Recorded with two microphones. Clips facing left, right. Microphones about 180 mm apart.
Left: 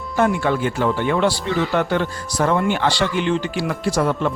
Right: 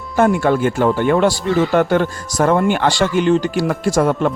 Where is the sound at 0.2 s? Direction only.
45° right (ahead or behind).